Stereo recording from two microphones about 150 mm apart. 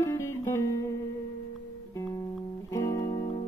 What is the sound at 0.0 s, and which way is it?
Music, 20° left (ahead or behind).